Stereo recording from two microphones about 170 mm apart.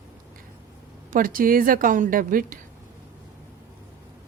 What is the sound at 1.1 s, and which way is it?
A woman's voice, 55° right (ahead or behind).